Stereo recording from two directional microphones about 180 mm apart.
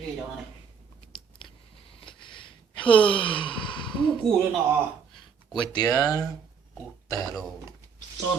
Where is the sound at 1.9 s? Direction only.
30° left (ahead or behind).